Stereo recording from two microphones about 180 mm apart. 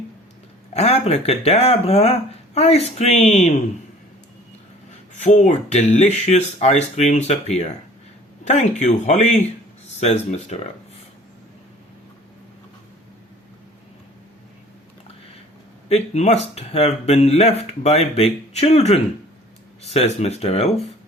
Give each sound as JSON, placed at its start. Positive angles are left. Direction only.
{"t": 0.7, "sound": "speech", "side_deg": 35}
{"t": 5.1, "sound": "speech", "side_deg": 40}
{"t": 15.9, "sound": "speech", "side_deg": 35}